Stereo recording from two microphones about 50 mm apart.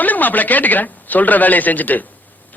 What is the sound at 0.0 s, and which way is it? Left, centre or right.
Speech, left.